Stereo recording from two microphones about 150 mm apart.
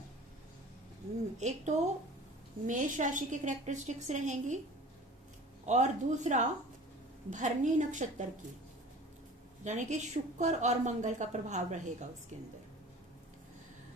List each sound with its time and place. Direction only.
1.4 s a woman's voice: 50° right (ahead or behind)
5.6 s a woman's voice: 50° right (ahead or behind)
9.6 s a woman's voice: 50° right (ahead or behind)